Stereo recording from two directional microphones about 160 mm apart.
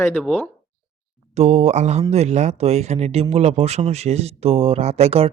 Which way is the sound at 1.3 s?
45° right (ahead or behind).